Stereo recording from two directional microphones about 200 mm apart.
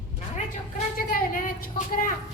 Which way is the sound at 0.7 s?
40° left (ahead or behind).